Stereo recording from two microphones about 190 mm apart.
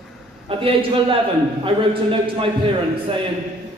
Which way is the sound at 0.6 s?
30° right (ahead or behind).